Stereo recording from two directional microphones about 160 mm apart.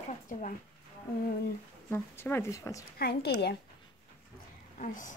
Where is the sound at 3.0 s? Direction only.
90° left.